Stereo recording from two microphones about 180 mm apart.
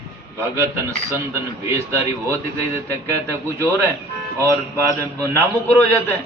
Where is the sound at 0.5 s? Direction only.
15° right (ahead or behind).